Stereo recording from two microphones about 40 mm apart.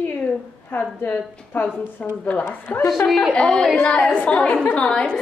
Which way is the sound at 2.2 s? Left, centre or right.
Left.